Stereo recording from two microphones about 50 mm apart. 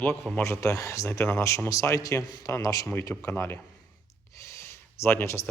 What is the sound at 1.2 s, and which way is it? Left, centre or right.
Speech, left.